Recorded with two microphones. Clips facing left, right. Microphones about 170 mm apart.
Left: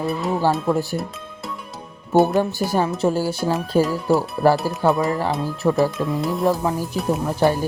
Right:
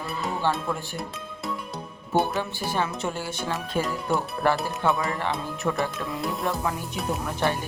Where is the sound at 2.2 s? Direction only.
40° left (ahead or behind).